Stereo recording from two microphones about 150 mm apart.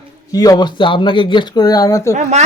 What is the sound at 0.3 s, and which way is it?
Speech, 25° left (ahead or behind).